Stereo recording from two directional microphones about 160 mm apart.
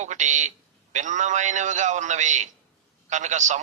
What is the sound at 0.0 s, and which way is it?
A man's voice, 50° right (ahead or behind).